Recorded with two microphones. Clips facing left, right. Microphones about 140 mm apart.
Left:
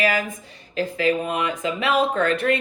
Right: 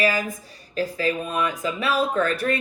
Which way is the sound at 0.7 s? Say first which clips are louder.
Left 1 dB; 40° right (ahead or behind).